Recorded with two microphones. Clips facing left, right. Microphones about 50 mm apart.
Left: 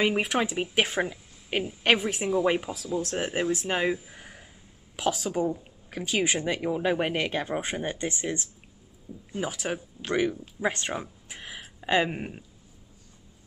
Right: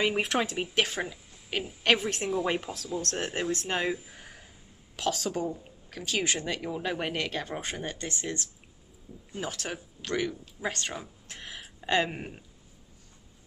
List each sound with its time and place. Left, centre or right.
0.0 s speech: centre
0.8 s speech: centre
11.0 s speech: centre